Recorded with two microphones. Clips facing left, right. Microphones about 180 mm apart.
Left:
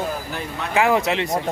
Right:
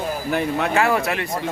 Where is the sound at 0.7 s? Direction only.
15° left (ahead or behind).